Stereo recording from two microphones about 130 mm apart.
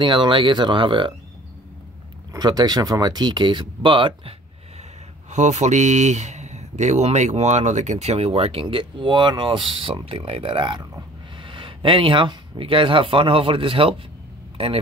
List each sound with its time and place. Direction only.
0.0 s speech: 40° right (ahead or behind)
2.3 s speech: 30° right (ahead or behind)
5.3 s speech: 65° right (ahead or behind); by 13.9 s 45° right (ahead or behind)